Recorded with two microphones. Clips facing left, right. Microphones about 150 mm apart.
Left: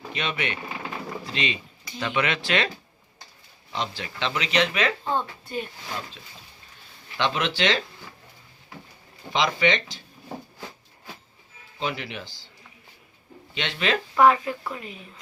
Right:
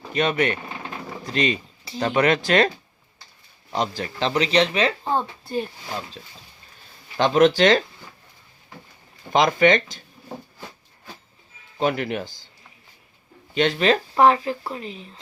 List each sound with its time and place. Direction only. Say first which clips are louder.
0.1 s speech: right 9 dB; 45° right (ahead or behind)
3.7 s speech: right 6 dB; 45° right (ahead or behind)
7.2 s speech: right 9 dB; 45° right (ahead or behind)
9.3 s speech: right 6 dB; 50° right (ahead or behind)
11.8 s speech: right 8 dB; 50° right (ahead or behind)
13.5 s speech: right 7 dB; 45° right (ahead or behind); by 15.2 s 30° right (ahead or behind)